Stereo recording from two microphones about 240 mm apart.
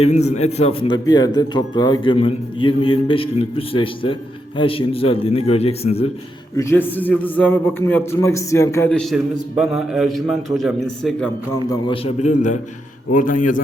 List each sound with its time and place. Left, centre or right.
0.0 s a man's voice: left
6.6 s a man's voice: centre
11.7 s a man's voice: left